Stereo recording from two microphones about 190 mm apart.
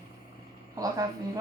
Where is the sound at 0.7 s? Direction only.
20° right (ahead or behind).